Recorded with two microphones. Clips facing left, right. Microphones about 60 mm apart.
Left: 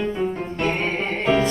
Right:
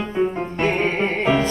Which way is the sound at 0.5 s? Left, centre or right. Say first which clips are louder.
Right 4 dB; right.